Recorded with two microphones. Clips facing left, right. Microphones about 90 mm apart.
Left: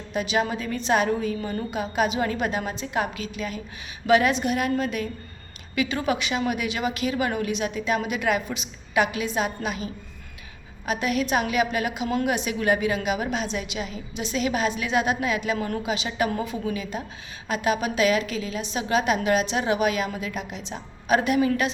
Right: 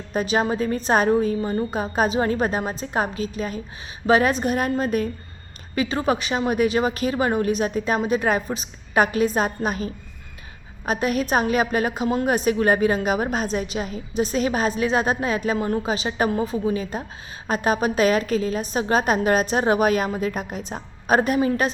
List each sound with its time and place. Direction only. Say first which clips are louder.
0.1 s a woman's voice: right 3 dB; 40° right (ahead or behind)
12.0 s a woman's voice: right 3 dB; 30° right (ahead or behind)
12.3 s a woman's voice: right 7 dB; 40° right (ahead or behind)